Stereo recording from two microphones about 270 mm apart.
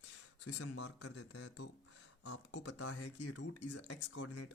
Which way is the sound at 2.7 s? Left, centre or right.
Left.